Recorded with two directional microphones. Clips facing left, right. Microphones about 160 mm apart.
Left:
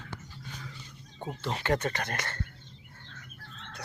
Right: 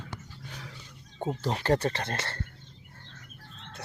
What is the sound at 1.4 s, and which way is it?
Speech, 35° right (ahead or behind).